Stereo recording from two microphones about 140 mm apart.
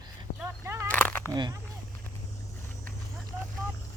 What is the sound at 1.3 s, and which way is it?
Speech, 30° right (ahead or behind).